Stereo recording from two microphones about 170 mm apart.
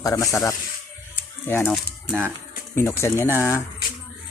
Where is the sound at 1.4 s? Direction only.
15° left (ahead or behind).